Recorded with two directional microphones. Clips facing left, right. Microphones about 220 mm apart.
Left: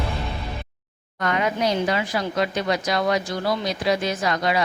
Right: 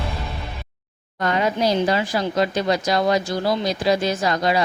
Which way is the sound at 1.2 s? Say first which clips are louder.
Right 2 dB; 30° right (ahead or behind).